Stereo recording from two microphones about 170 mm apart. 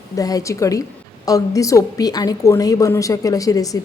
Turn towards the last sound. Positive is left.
turn(degrees=20)  # may be behind; listen again after turning